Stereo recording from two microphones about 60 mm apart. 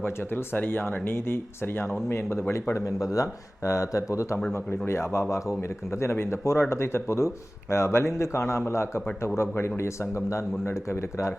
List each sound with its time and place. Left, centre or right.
0.0 s speech: left
4.9 s speech: left